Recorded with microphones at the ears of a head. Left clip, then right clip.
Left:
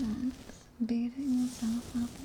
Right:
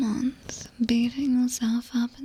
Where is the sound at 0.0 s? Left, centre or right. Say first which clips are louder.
Right 8 dB; right.